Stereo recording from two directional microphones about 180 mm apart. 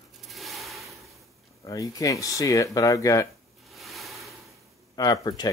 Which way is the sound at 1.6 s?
20° left (ahead or behind).